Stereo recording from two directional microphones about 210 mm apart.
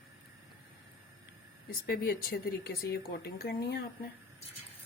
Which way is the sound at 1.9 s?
45° left (ahead or behind).